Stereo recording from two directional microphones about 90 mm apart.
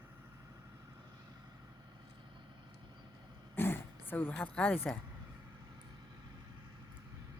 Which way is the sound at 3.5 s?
25° left (ahead or behind).